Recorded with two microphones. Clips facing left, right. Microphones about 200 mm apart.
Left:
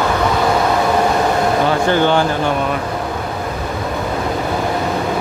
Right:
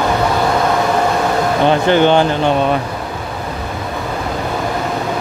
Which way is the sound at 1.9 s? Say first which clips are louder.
Right 4 dB; 20° right (ahead or behind).